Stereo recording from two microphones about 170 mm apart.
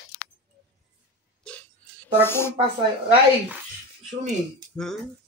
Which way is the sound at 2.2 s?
15° left (ahead or behind).